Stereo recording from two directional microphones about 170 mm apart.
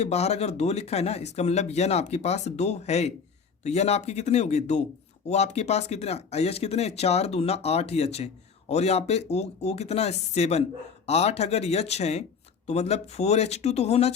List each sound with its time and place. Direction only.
0.0 s speech: 40° left (ahead or behind)